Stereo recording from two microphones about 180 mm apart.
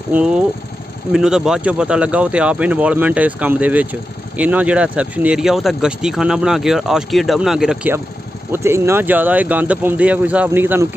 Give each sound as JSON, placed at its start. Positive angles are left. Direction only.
{"t": 0.1, "sound": "speech", "side_deg": -5}